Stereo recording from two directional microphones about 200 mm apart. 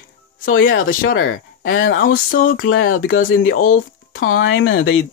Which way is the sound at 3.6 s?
45° left (ahead or behind).